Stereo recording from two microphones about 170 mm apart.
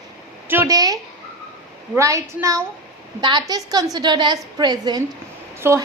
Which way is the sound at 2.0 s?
20° right (ahead or behind).